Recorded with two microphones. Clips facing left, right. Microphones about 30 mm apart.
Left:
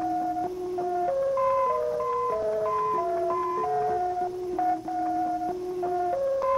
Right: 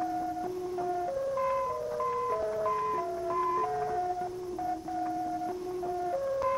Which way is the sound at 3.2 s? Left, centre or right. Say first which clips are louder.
Left 3 dB; centre.